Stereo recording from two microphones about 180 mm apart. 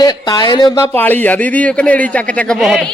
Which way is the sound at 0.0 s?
20° left (ahead or behind).